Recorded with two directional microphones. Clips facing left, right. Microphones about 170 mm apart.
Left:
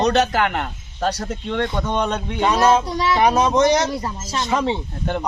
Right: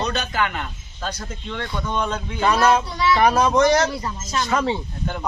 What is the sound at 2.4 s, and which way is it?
A woman's voice, 20° left (ahead or behind).